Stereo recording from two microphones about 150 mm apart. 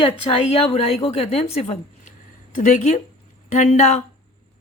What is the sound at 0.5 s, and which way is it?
A woman's voice, 45° left (ahead or behind).